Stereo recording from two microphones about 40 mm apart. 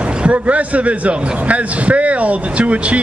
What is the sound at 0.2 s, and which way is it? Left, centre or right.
Speech, right.